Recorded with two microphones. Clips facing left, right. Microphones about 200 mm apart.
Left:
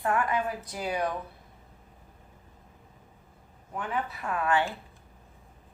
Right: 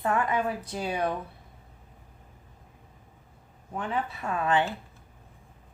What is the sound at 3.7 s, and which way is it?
Speech, 25° right (ahead or behind).